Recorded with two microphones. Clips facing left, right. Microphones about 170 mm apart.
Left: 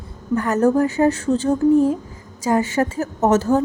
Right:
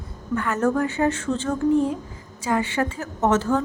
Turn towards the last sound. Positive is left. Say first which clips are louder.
# left 4 dB
turn(degrees=40)  # may be behind; listen again after turning